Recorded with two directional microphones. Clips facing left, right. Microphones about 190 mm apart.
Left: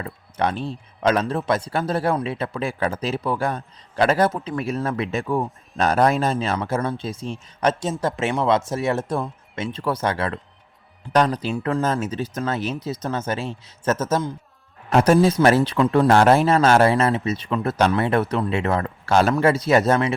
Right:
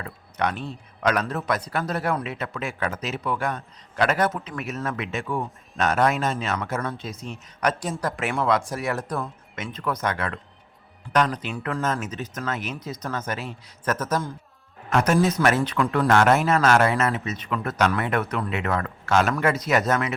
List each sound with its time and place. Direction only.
0.0 s a man's voice: 30° left (ahead or behind)